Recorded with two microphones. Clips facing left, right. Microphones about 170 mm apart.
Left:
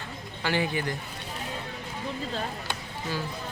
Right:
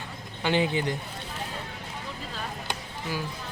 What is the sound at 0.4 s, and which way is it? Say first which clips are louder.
Speech: right 3 dB; 20° right (ahead or behind).